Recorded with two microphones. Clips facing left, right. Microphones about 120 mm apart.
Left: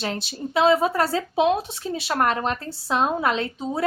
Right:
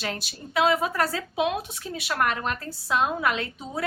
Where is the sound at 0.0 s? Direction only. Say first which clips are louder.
Left 5 dB; 25° left (ahead or behind).